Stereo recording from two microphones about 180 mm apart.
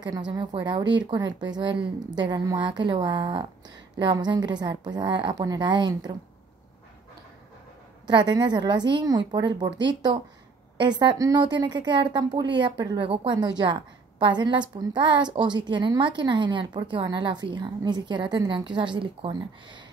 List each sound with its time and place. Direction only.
0.3 s a woman's voice: 25° right (ahead or behind)
8.1 s a woman's voice: 25° right (ahead or behind)
9.7 s speech: 80° right
10.8 s a woman's voice: 25° right (ahead or behind)